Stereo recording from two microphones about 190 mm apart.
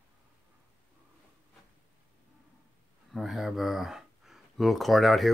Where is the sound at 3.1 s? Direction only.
Centre (ahead or behind).